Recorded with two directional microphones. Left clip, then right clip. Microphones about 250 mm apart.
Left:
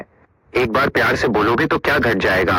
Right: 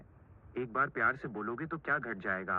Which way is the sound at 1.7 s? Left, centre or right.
Left.